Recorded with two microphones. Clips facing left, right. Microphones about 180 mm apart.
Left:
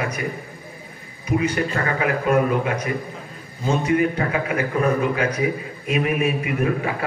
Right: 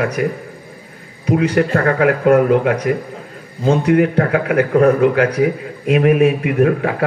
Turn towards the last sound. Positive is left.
turn(degrees=-70)  # may be behind; listen again after turning